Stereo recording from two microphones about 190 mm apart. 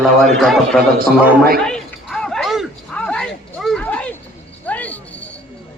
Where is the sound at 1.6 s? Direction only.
5° left (ahead or behind).